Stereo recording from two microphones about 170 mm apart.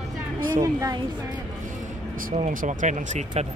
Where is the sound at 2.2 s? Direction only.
50° right (ahead or behind).